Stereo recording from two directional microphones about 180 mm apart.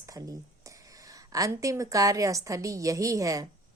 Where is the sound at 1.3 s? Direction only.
20° right (ahead or behind).